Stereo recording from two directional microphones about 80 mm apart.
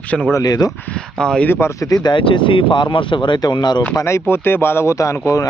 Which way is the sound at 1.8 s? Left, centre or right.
Left.